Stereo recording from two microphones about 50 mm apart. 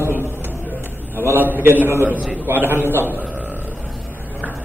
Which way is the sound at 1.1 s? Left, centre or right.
Right.